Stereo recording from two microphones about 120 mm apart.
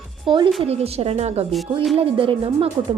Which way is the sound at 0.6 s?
55° right (ahead or behind).